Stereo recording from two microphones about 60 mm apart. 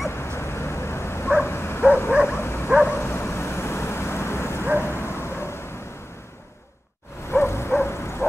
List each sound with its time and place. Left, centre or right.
0.1 s dog: left
3.0 s vehicle: left
4.7 s dog: left
7.2 s a sound: left